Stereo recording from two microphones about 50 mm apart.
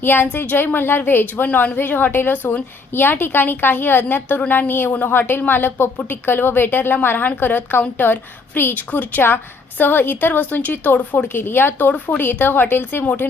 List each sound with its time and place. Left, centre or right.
0.0 s a woman's voice: left
11.3 s a woman's voice: left
11.9 s a woman's voice: left
12.2 s a woman's voice: left